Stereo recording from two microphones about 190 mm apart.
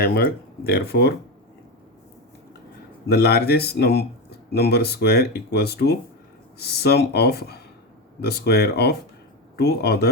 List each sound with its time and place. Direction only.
0.0 s speech: 50° left (ahead or behind)
3.1 s speech: 60° left (ahead or behind)